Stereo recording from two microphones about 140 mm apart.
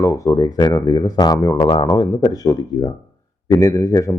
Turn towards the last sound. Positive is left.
turn(degrees=25)  # may be behind; listen again after turning